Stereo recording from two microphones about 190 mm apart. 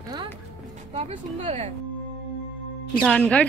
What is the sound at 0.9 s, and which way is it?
Speech, 35° right (ahead or behind).